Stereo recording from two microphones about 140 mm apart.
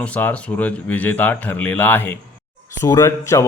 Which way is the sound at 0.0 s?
10° left (ahead or behind).